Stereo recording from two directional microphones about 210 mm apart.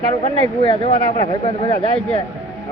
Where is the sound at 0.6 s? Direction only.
25° left (ahead or behind).